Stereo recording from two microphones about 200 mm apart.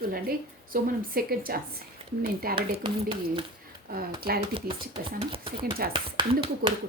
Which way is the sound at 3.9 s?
50° right (ahead or behind).